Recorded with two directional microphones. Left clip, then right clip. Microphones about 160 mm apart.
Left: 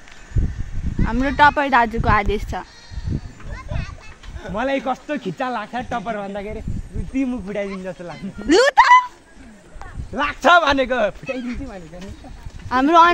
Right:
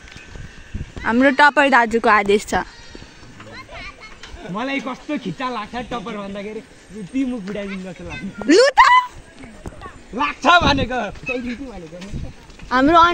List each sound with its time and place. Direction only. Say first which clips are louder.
1.0 s speech: right 2 dB; 25° right (ahead or behind)
4.6 s speech: left 4 dB; 25° left (ahead or behind)
8.5 s a sound: right 1 dB; 5° right (ahead or behind)
10.1 s a man's voice: even; 30° left (ahead or behind)
12.6 s speech: even; 5° left (ahead or behind)